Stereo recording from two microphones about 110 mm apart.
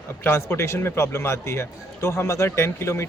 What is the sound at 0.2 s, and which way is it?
A man's voice, 20° left (ahead or behind).